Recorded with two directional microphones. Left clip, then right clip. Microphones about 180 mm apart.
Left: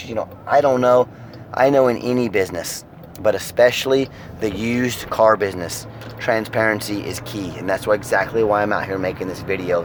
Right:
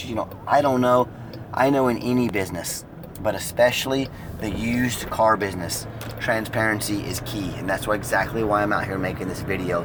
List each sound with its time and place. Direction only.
0.4 s speech: 45° left (ahead or behind)